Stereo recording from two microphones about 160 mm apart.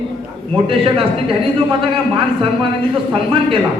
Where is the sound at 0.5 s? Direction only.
35° right (ahead or behind).